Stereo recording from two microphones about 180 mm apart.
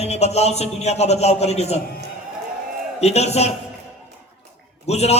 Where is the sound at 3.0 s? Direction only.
35° left (ahead or behind).